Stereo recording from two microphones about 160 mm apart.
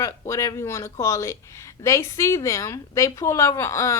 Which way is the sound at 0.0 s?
20° left (ahead or behind).